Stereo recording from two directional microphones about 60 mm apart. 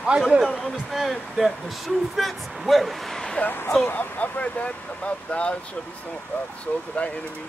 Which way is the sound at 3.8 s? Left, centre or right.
Left.